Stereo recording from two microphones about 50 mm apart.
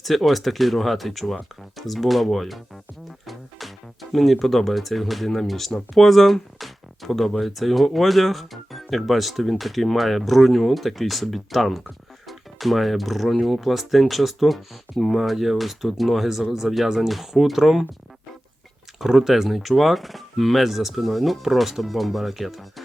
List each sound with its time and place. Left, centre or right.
0.0 s speech: centre
4.1 s speech: centre
18.9 s speech: centre